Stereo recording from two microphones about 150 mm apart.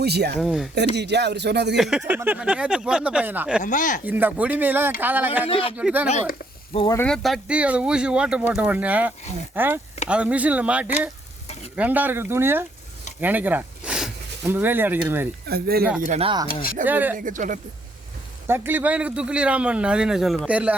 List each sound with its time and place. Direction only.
0.0 s speech: 90° right
0.3 s speech: 5° right (ahead or behind)
1.1 s speech: 90° right
1.7 s a man's voice: 5° right (ahead or behind)
3.6 s speech: 60° left (ahead or behind)
4.0 s a man's voice: 10° right (ahead or behind)
7.0 s a man's voice: 5° left (ahead or behind); by 15.3 s 15° right (ahead or behind)
15.4 s speech: 90° right
16.0 s speech: 55° right (ahead or behind)
16.2 s speech: 30° right (ahead or behind)
16.5 s speech: 75° left (ahead or behind)
16.8 s a man's voice: 10° right (ahead or behind)
17.2 s speech: 60° right (ahead or behind)
18.4 s a man's voice: 15° right (ahead or behind)